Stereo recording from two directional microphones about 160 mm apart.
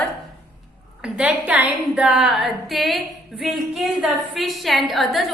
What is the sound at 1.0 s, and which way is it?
A woman's voice, 10° right (ahead or behind).